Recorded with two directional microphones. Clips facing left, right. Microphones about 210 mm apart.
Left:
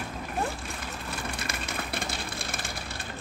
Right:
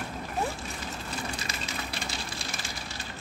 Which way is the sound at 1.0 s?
55° left (ahead or behind).